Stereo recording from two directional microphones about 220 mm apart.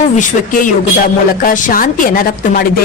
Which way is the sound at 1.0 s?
40° left (ahead or behind).